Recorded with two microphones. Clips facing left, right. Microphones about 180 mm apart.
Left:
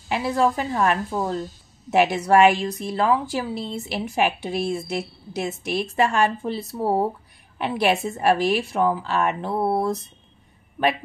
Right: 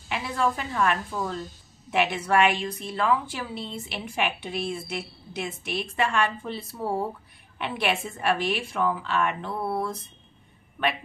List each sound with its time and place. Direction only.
0.1 s a woman's voice: 35° left (ahead or behind)